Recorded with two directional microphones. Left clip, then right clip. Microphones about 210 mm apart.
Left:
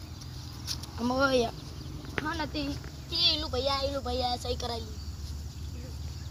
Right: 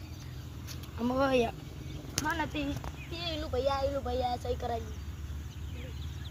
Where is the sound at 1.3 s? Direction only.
30° right (ahead or behind).